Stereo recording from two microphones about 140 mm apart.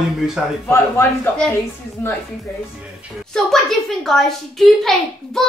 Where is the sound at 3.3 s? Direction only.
Centre (ahead or behind).